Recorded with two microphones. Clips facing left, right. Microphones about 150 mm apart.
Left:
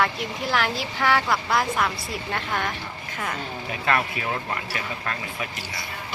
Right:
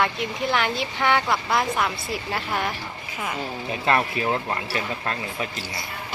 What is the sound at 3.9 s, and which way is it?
Speech, 25° right (ahead or behind).